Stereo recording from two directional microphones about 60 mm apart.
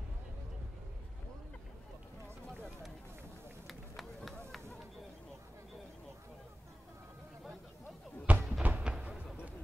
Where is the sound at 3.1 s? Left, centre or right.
Right.